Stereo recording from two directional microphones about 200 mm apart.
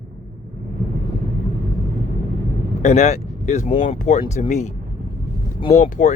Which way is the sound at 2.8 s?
35° left (ahead or behind).